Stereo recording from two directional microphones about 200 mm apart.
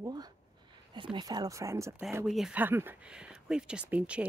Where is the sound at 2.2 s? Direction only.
Centre (ahead or behind).